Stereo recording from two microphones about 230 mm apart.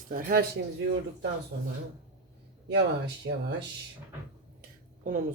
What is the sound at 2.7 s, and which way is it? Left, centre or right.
Speech, right.